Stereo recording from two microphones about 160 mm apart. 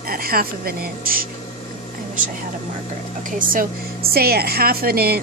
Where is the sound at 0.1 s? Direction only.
70° right (ahead or behind).